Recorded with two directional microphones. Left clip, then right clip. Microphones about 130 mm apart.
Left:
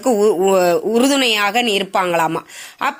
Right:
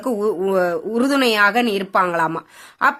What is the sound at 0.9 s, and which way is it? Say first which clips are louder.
Speech: left 2 dB; 10° left (ahead or behind).